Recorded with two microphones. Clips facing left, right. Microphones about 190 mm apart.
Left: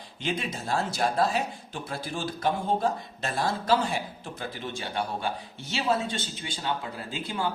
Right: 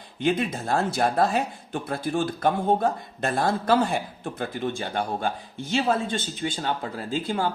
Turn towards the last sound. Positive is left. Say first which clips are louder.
# right 6 dB
turn(degrees=-50)  # may be behind; listen again after turning